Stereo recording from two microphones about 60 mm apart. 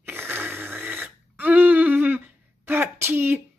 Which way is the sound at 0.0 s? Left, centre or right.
Right.